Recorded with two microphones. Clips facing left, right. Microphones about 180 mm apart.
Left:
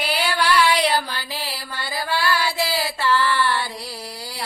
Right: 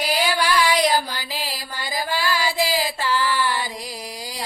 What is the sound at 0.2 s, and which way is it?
Music, 15° right (ahead or behind).